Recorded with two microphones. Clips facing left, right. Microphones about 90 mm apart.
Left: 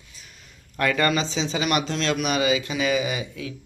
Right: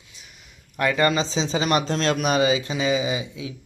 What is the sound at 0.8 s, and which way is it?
Speech, 20° right (ahead or behind).